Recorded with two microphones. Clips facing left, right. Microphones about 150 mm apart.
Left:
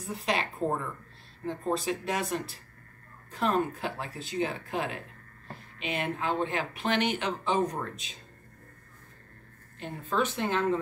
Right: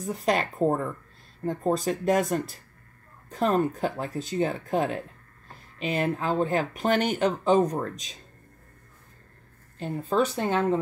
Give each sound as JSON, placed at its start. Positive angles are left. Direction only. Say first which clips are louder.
{"t": 0.0, "sound": "speech", "louder": "right 5 dB", "side_deg": -45}
{"t": 9.8, "sound": "speech", "louder": "right 5 dB", "side_deg": -35}